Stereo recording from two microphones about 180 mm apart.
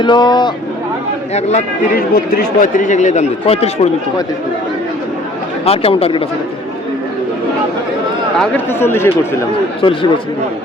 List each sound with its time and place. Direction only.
0.0 s speech: 25° left (ahead or behind)
1.3 s speech: 35° left (ahead or behind)
2.0 s a man's voice: 55° left (ahead or behind); by 3.8 s 35° left (ahead or behind)
5.6 s speech: 35° left (ahead or behind)
8.4 s speech: 10° left (ahead or behind)
9.8 s speech: 30° left (ahead or behind)